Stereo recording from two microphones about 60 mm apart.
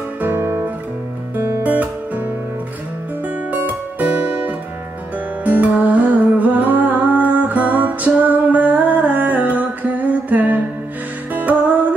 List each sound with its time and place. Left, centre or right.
0.2 s guitar: right
1.6 s music: right
3.5 s music: right